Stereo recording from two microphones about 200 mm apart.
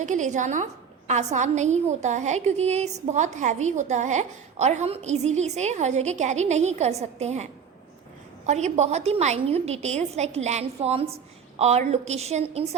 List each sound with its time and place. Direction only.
0.0 s a woman's voice: 35° right (ahead or behind)
8.4 s a woman's voice: 35° right (ahead or behind)